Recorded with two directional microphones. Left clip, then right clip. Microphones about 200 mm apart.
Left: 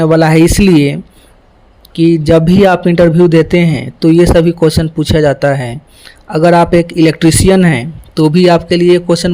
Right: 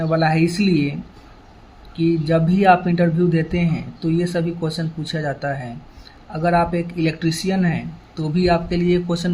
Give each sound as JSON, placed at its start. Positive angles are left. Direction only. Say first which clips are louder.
{"t": 0.0, "sound": "speech", "louder": "left 11 dB", "side_deg": 55}